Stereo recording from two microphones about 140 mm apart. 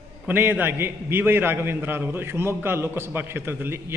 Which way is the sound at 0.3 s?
15° right (ahead or behind).